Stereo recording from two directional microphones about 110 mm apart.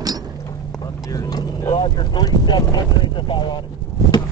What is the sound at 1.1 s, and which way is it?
Vehicle, 35° left (ahead or behind).